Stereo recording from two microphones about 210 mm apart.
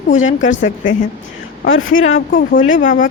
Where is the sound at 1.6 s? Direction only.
70° left (ahead or behind).